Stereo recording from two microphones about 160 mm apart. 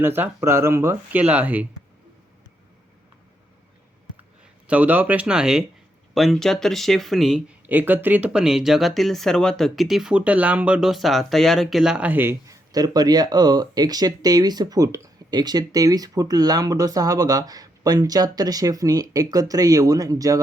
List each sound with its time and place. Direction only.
0.0 s speech: 15° right (ahead or behind)
4.6 s speech: 10° right (ahead or behind)